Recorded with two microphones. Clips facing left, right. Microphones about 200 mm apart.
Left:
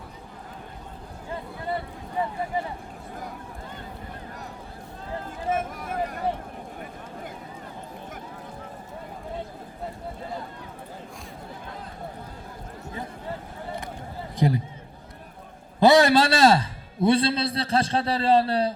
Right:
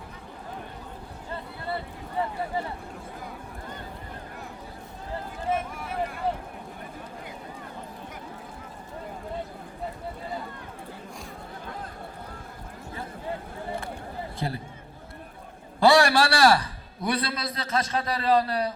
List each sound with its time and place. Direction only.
5.5 s speech: 45° left (ahead or behind)
14.3 s a man's voice: 15° left (ahead or behind)
15.8 s a man's voice: 20° left (ahead or behind)